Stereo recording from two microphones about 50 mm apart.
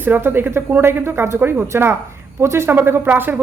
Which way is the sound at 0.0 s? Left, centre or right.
Right.